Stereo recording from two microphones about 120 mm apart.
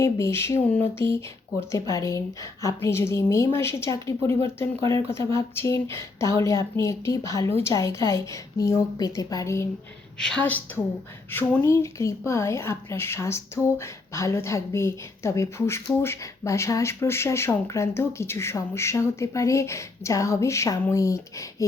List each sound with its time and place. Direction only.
0.0 s speech: 25° left (ahead or behind)
10.7 s speech: 15° left (ahead or behind)